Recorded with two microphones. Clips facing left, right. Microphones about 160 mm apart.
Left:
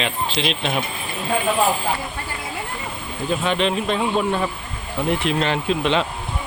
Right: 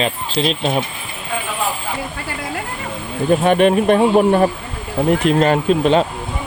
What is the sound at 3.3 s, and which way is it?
Speech, 50° right (ahead or behind).